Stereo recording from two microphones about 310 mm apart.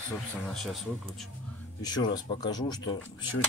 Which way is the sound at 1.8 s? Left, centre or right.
Centre.